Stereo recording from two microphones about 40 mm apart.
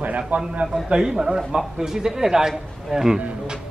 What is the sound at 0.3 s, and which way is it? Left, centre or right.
Speech, right.